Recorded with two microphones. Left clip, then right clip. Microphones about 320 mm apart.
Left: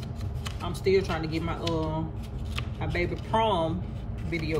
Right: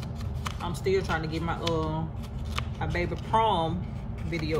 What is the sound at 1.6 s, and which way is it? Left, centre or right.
Speech, centre.